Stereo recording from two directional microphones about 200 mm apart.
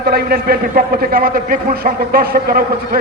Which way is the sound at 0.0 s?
50° right (ahead or behind).